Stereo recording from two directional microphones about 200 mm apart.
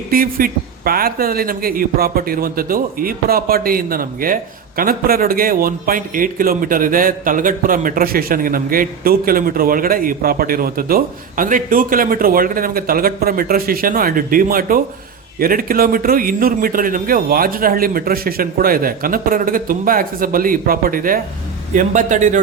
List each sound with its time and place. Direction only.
0.1 s a man's voice: 45° right (ahead or behind)